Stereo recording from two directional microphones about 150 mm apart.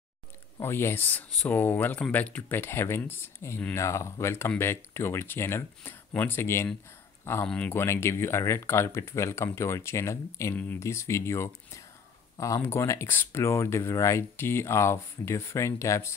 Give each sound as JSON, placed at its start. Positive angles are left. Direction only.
{"t": 0.6, "sound": "speech", "side_deg": 15}
{"t": 7.8, "sound": "speech", "side_deg": 15}